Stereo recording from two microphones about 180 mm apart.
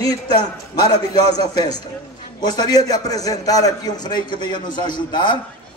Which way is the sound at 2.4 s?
25° left (ahead or behind).